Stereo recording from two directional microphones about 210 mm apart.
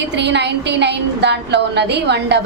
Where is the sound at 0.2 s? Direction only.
55° right (ahead or behind).